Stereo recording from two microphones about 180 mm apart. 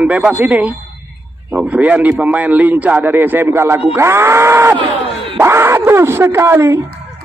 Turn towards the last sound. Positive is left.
turn(degrees=-15)  # may be behind; listen again after turning